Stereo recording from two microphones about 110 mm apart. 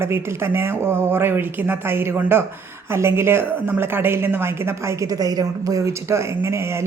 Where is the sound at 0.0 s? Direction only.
20° right (ahead or behind).